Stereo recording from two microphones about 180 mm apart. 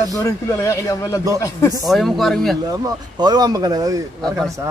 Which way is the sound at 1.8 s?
Centre (ahead or behind).